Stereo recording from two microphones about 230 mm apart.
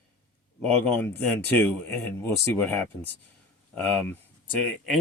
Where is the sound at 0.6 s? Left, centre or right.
Centre.